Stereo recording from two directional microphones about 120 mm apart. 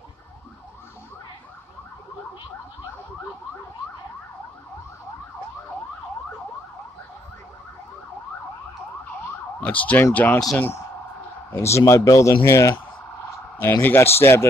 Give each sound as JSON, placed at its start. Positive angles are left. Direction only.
{"t": 9.6, "sound": "emergency vehicle", "side_deg": 10}
{"t": 11.5, "sound": "speech", "side_deg": 25}